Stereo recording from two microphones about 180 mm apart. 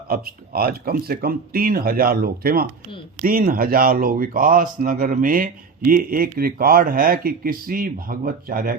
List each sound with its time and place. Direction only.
0.1 s a man's voice: 55° right (ahead or behind)